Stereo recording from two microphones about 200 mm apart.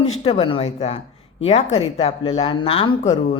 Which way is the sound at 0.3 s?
25° left (ahead or behind).